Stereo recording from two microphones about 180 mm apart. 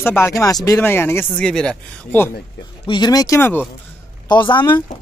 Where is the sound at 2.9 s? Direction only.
25° left (ahead or behind).